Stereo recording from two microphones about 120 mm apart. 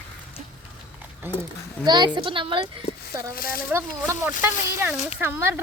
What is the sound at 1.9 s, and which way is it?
Speech, 40° right (ahead or behind).